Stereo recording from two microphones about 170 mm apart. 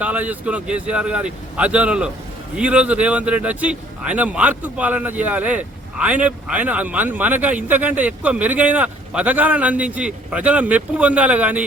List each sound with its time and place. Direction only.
0.0 s a man's voice: 10° right (ahead or behind)